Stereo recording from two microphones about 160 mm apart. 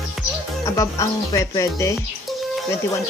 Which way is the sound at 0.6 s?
20° left (ahead or behind).